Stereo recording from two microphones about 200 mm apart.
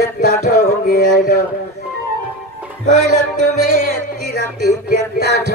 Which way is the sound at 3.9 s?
55° right (ahead or behind).